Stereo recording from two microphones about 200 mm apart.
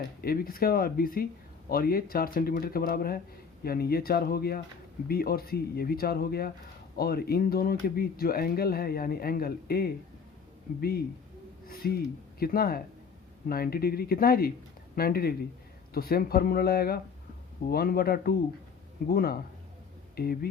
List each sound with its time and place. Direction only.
0.2 s speech: 45° left (ahead or behind)